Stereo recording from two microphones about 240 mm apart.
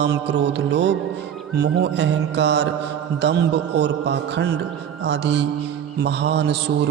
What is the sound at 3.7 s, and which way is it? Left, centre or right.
Mantra, right.